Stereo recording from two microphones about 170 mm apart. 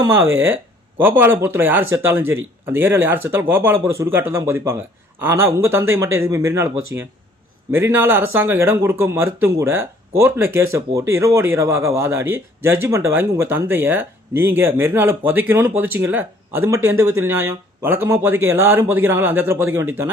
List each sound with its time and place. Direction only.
0.0 s a man's voice: 15° right (ahead or behind)